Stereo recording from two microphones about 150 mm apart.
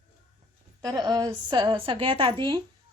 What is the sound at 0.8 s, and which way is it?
A woman's voice, 25° right (ahead or behind).